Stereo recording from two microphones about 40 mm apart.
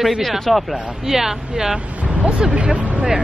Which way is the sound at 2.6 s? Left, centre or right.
Right.